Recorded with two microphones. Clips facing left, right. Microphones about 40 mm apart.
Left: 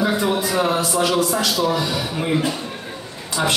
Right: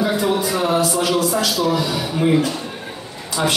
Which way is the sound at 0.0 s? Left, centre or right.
Centre.